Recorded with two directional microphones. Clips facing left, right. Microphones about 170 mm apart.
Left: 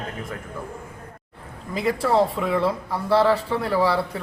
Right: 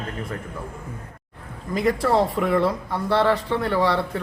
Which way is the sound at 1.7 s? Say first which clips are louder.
Right 1 dB; centre (ahead or behind).